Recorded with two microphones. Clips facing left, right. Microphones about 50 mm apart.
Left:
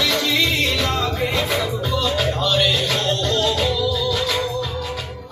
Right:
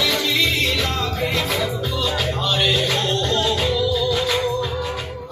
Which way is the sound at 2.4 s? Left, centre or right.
Centre.